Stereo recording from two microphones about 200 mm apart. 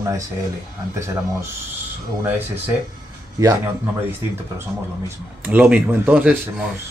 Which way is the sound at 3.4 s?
15° right (ahead or behind).